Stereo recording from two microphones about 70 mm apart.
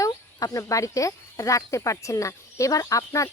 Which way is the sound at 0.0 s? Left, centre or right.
Left.